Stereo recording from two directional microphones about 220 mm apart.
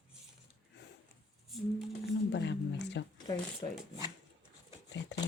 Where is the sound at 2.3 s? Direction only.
50° left (ahead or behind).